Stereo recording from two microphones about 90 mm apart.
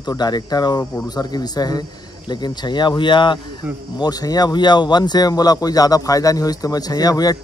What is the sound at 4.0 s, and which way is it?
Speech, 45° left (ahead or behind).